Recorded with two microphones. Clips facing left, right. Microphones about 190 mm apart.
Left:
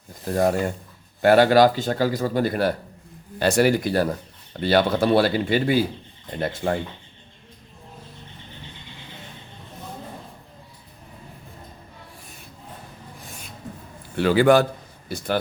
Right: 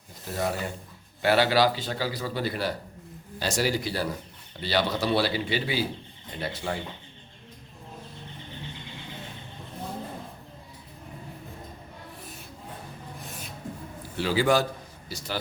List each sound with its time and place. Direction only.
0.3 s speech: 45° left (ahead or behind)
14.2 s speech: 60° left (ahead or behind)